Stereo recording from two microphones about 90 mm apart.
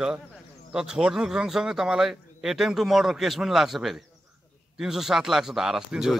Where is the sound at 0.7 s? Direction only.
5° right (ahead or behind).